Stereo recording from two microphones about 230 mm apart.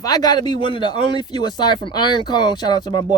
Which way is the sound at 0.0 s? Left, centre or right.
Centre.